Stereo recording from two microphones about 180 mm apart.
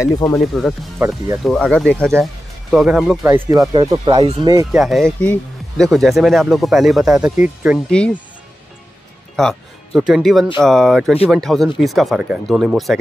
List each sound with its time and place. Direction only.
0.0 s speech: 15° left (ahead or behind)
0.6 s speech: centre (ahead or behind)
3.3 s speech: 15° right (ahead or behind)
4.7 s speech: centre (ahead or behind)
7.9 s speech: 5° left (ahead or behind)
9.4 s speech: centre (ahead or behind)